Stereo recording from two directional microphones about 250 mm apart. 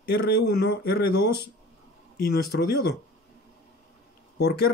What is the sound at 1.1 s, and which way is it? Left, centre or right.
Speech, left.